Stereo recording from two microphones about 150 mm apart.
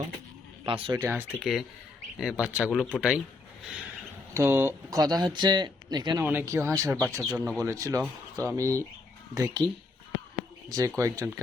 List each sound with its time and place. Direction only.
0.6 s speech: 35° right (ahead or behind)
0.9 s speech: 15° right (ahead or behind)
1.4 s speech: centre (ahead or behind)
4.4 s speech: 15° right (ahead or behind)
6.2 s speech: 15° right (ahead or behind)
7.2 s speech: centre (ahead or behind)
7.6 s speech: 20° right (ahead or behind)
10.7 s speech: 20° right (ahead or behind)